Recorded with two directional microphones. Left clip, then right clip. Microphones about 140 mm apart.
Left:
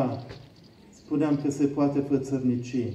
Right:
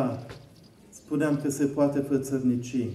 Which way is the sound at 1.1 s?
25° right (ahead or behind).